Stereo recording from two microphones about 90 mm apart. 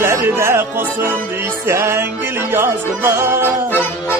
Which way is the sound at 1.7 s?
30° right (ahead or behind).